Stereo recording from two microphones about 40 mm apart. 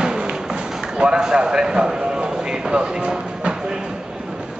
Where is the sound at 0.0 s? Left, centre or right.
Centre.